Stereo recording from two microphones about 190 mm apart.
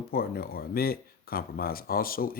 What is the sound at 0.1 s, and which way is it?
Speech, 50° left (ahead or behind).